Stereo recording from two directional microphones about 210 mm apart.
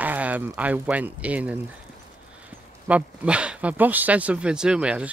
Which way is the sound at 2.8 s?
5° right (ahead or behind).